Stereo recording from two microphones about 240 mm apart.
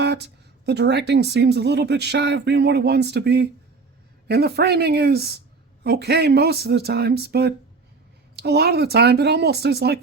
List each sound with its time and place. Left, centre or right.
0.0 s a woman's voice: right